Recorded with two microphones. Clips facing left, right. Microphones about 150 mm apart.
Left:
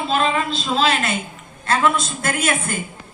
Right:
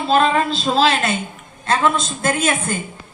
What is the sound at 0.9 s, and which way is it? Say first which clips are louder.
A woman's voice: right 2 dB; 25° right (ahead or behind).